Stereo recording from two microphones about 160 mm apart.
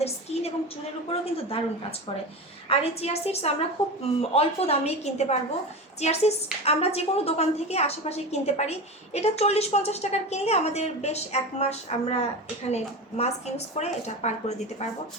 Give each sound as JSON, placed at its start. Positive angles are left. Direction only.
{"t": 0.0, "sound": "a sound", "side_deg": 40}
{"t": 1.2, "sound": "a woman's voice", "side_deg": 35}
{"t": 2.6, "sound": "a woman's voice", "side_deg": 40}